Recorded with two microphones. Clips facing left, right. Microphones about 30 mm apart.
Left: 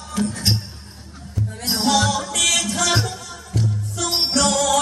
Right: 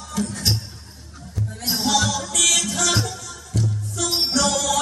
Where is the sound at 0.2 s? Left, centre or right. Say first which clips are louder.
Left 2 dB; centre.